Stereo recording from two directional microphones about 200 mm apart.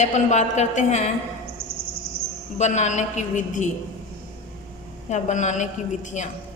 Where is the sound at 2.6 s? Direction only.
35° left (ahead or behind).